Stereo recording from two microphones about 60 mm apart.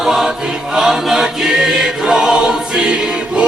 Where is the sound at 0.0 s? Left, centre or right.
Centre.